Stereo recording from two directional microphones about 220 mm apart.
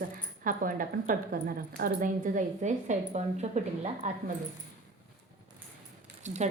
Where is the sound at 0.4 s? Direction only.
40° right (ahead or behind).